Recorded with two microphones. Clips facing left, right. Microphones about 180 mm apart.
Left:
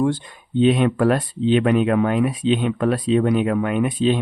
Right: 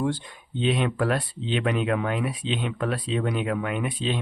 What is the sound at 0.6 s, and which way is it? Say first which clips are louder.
Speech: left 8 dB; 50° left (ahead or behind).